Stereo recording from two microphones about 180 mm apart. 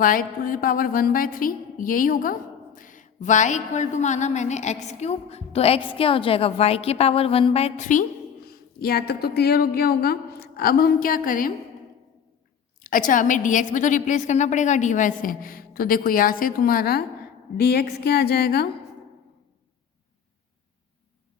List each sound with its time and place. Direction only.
0.0 s a woman's voice: 50° left (ahead or behind)
12.8 s a woman's voice: 50° left (ahead or behind)